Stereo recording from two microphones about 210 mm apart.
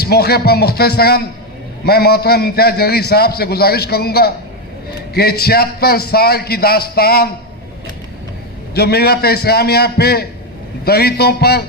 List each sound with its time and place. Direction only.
0.0 s a man's voice: 50° left (ahead or behind)
8.7 s a man's voice: 50° left (ahead or behind)